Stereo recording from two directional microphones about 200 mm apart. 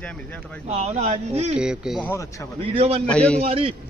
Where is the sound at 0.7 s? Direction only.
30° right (ahead or behind).